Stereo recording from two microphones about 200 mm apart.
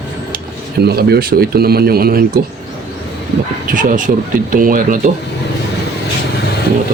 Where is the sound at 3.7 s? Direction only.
40° right (ahead or behind).